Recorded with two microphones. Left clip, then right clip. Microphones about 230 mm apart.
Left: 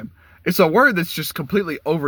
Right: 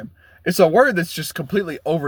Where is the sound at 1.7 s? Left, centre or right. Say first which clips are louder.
Even; right.